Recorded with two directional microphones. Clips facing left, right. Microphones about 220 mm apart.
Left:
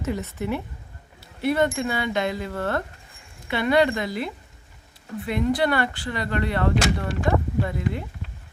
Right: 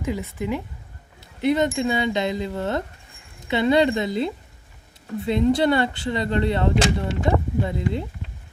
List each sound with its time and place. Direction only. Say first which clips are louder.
0.0 s a woman's voice: right 1 dB; 10° right (ahead or behind)